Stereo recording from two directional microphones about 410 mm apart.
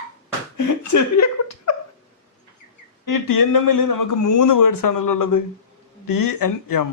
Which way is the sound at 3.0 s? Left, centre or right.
Left.